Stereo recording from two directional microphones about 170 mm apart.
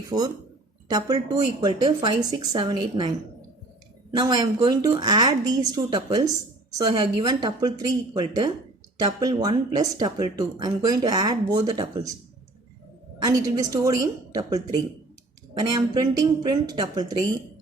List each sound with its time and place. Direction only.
0.1 s a woman's voice: 20° right (ahead or behind)
13.2 s a woman's voice: 20° right (ahead or behind)